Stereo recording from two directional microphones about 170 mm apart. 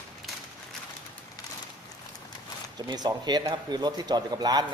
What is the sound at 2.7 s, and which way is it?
Speech, 25° right (ahead or behind).